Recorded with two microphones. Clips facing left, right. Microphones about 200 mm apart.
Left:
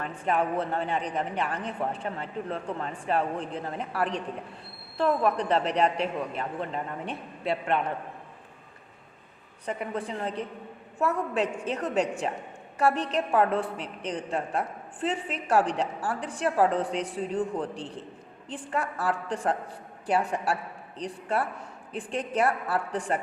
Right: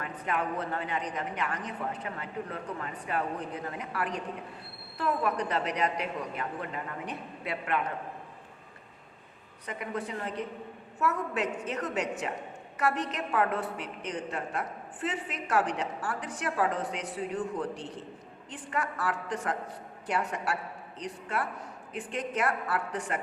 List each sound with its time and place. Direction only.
0.0 s a man's voice: 30° left (ahead or behind)
9.6 s a woman's voice: 30° left (ahead or behind)